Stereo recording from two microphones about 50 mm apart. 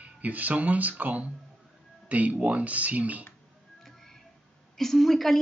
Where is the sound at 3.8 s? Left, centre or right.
Centre.